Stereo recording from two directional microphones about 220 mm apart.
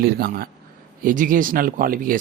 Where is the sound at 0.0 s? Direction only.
40° right (ahead or behind).